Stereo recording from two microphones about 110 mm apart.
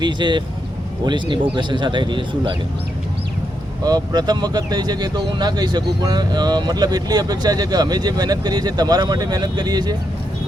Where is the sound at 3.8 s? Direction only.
40° right (ahead or behind).